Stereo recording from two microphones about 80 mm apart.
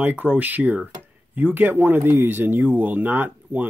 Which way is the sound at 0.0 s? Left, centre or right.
Right.